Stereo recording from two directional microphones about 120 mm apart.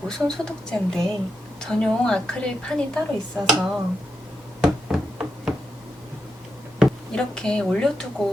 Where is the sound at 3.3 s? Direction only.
5° right (ahead or behind).